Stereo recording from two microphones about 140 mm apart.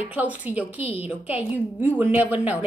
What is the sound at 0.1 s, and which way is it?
A woman's voice, 10° right (ahead or behind).